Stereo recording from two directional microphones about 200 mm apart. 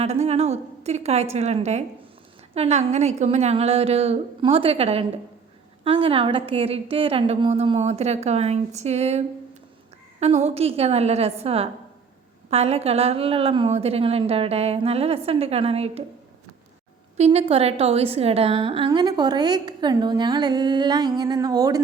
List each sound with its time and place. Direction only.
0.0 s a woman's voice: 30° right (ahead or behind)
17.2 s a woman's voice: 30° right (ahead or behind)